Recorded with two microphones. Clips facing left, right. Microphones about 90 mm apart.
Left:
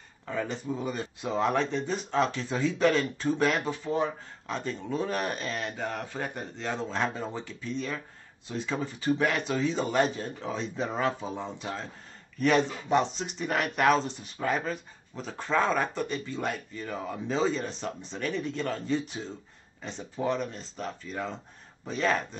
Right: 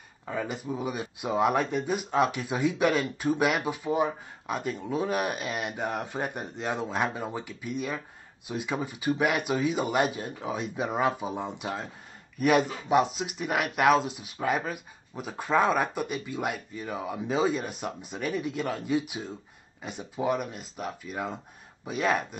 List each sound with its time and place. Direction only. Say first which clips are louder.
0.2 s speech: even; 10° right (ahead or behind)